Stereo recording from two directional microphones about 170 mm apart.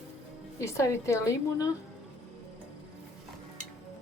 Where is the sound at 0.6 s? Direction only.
15° left (ahead or behind).